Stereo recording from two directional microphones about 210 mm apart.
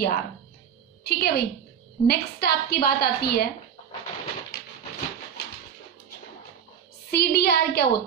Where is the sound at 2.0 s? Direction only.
50° left (ahead or behind).